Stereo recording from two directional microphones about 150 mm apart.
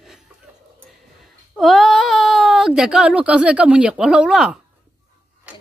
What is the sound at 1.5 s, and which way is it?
Speech, centre (ahead or behind).